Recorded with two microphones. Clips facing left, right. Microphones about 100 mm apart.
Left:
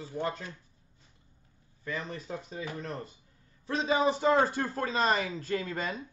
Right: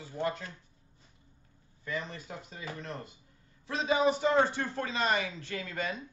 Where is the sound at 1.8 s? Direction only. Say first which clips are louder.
Left 1 dB; 35° left (ahead or behind).